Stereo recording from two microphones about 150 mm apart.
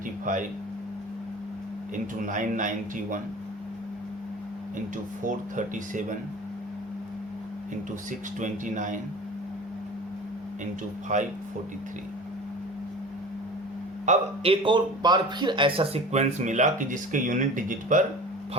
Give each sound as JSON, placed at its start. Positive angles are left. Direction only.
{"t": 0.3, "sound": "speech", "side_deg": -60}
{"t": 2.2, "sound": "speech", "side_deg": -60}
{"t": 5.2, "sound": "speech", "side_deg": -60}
{"t": 8.4, "sound": "speech", "side_deg": -60}
{"t": 11.1, "sound": "speech", "side_deg": -55}
{"t": 14.0, "sound": "speech", "side_deg": -45}